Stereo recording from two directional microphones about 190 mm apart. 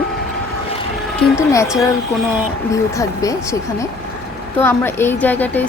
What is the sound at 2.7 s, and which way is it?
Speech, 15° left (ahead or behind).